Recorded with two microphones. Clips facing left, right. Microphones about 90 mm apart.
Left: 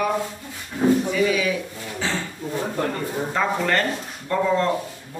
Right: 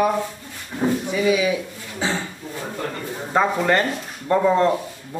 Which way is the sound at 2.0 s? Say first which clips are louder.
Right 2 dB; 20° right (ahead or behind).